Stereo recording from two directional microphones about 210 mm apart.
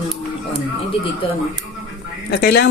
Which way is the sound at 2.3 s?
50° left (ahead or behind).